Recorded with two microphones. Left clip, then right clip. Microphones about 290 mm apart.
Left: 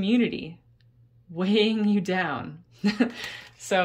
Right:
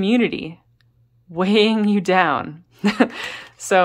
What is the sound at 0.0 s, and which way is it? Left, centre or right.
A woman's voice, centre.